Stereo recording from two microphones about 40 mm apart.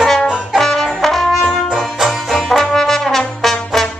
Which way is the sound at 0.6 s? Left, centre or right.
Centre.